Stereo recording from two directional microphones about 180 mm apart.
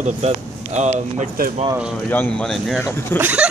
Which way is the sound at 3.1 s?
10° right (ahead or behind).